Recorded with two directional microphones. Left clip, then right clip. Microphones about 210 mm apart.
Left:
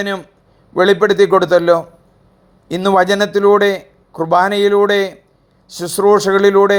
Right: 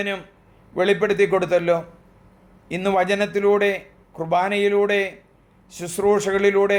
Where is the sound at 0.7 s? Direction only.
30° left (ahead or behind).